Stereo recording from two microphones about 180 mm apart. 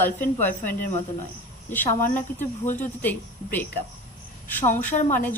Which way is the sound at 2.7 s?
10° left (ahead or behind).